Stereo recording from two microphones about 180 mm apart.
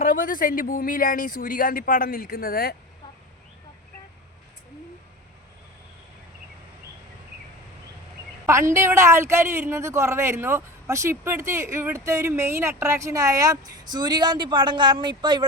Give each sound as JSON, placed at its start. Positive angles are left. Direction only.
{"t": 0.0, "sound": "speech", "side_deg": 50}
{"t": 8.4, "sound": "a woman's voice", "side_deg": -15}